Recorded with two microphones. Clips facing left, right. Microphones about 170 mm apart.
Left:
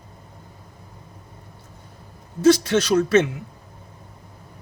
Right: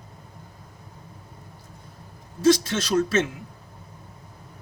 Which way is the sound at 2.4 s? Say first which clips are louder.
Left 4 dB; 60° left (ahead or behind).